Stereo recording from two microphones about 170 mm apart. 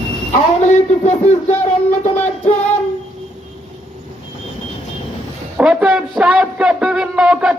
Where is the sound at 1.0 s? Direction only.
40° left (ahead or behind).